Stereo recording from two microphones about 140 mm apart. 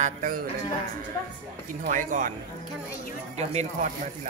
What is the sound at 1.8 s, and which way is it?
Speech, 65° right (ahead or behind).